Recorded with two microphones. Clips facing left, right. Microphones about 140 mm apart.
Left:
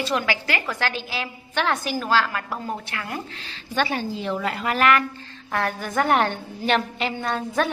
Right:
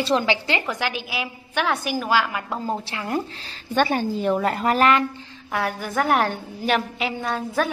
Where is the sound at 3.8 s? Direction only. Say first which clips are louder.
Right 4 dB; 45° right (ahead or behind).